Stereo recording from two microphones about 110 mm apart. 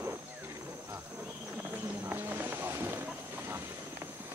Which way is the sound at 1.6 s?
15° right (ahead or behind).